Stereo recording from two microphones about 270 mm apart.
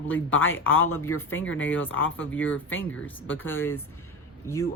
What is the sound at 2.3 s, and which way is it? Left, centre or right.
Speech, left.